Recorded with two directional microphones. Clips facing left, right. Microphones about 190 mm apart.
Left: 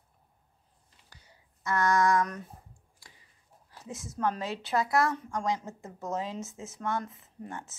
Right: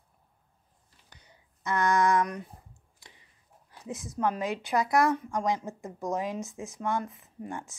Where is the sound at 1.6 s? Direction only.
20° right (ahead or behind).